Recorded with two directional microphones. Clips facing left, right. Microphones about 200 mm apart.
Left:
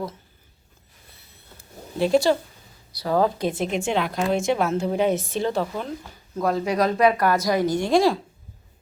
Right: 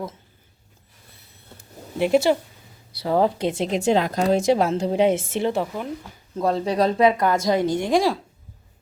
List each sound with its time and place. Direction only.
1.5 s a sound: 20° right (ahead or behind)
3.0 s a woman's voice: 25° right (ahead or behind)
3.8 s a woman's voice: 40° right (ahead or behind); by 8.1 s 15° right (ahead or behind)